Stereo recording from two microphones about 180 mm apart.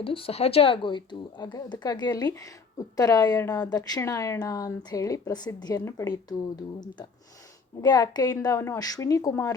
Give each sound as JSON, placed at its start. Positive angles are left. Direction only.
{"t": 0.0, "sound": "a woman's voice", "side_deg": 30}